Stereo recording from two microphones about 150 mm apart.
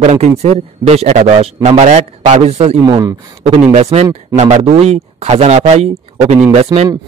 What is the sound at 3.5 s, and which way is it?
A man's voice, 45° right (ahead or behind).